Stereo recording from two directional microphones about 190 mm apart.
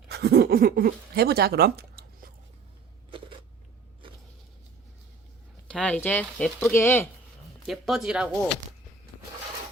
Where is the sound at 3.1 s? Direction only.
25° right (ahead or behind).